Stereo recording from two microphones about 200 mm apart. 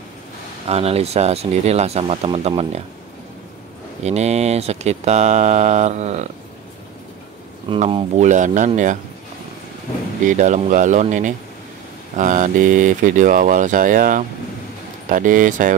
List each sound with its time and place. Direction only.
0.7 s speech: 30° right (ahead or behind)
4.0 s speech: 35° right (ahead or behind)
7.7 s speech: 30° right (ahead or behind)
10.2 s speech: 40° right (ahead or behind)